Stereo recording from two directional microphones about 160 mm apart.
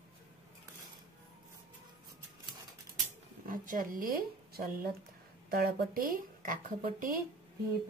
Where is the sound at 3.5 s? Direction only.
60° right (ahead or behind).